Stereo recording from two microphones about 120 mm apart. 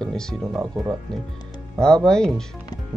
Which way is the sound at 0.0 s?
5° left (ahead or behind).